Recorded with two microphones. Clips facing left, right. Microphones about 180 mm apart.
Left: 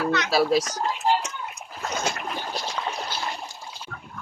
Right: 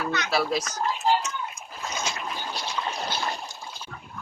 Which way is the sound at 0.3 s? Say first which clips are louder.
Left 5 dB; 35° left (ahead or behind).